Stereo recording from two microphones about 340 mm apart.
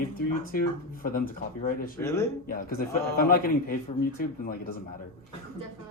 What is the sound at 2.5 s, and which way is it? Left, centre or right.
A man's voice, left.